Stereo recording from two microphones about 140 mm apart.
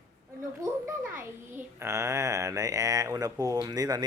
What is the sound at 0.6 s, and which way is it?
A child's voice, 20° right (ahead or behind).